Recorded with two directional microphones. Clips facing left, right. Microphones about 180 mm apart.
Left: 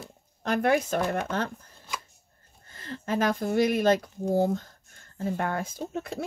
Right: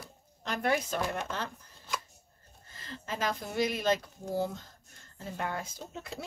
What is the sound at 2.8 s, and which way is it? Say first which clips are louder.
Speech: left 8 dB; 55° left (ahead or behind).